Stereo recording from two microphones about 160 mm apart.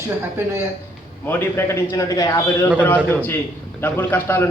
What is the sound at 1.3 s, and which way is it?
A man's voice, 15° left (ahead or behind).